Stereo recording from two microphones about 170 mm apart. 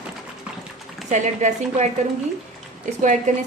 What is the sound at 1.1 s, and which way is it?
A woman's voice, 45° right (ahead or behind).